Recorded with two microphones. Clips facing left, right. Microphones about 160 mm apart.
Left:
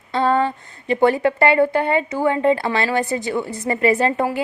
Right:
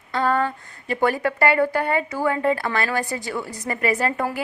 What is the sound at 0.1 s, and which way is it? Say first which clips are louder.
A woman's voice: left 3 dB; 25° left (ahead or behind).